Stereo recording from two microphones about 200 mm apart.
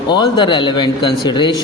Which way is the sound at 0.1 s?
25° left (ahead or behind).